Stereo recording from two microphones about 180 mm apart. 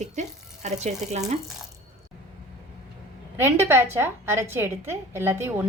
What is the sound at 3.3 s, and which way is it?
A woman's voice, 15° right (ahead or behind).